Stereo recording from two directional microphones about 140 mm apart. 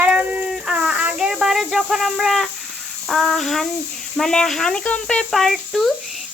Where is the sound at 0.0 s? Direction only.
10° right (ahead or behind).